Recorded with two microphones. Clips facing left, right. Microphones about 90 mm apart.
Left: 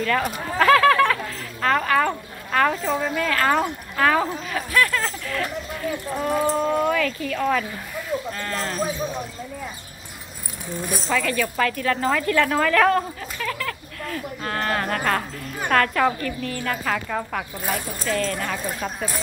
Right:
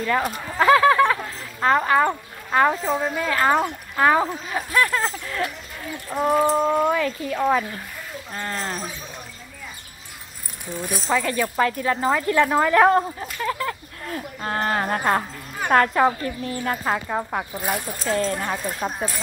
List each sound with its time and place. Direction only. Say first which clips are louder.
0.0 s speech: even; 20° right (ahead or behind)
11.1 s speech: right 1 dB; 25° right (ahead or behind)